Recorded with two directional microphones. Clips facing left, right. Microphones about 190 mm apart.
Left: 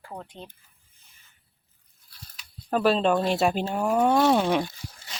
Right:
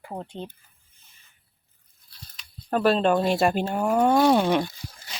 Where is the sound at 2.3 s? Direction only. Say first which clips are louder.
Right 1 dB; centre (ahead or behind).